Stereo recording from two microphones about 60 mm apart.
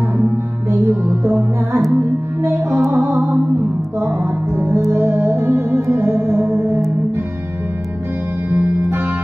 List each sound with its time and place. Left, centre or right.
0.7 s music: right
2.9 s music: right